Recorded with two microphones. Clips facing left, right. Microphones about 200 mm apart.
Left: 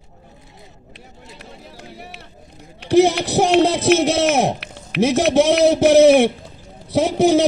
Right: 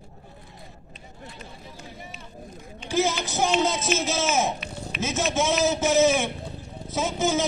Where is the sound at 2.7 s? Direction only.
65° left (ahead or behind).